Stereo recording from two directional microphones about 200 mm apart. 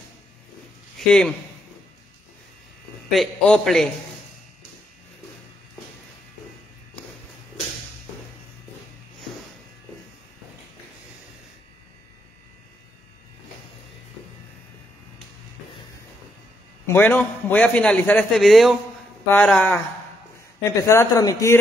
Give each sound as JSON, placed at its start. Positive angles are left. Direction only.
{"t": 0.9, "sound": "a man's voice", "side_deg": 5}
{"t": 3.1, "sound": "a man's voice", "side_deg": 0}
{"t": 16.8, "sound": "a man's voice", "side_deg": 10}
{"t": 20.8, "sound": "a man's voice", "side_deg": 15}